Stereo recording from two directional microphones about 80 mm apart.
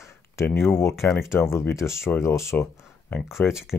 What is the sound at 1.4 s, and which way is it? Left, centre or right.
Speech, left.